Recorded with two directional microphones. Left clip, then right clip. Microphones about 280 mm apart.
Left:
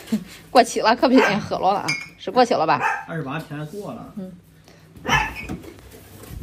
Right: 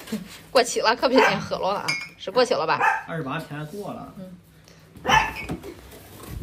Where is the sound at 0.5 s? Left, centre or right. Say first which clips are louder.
Left 4 dB; centre.